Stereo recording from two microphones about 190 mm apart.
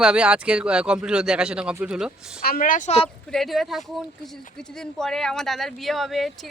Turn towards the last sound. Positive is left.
turn(degrees=0)  # may be behind; listen again after turning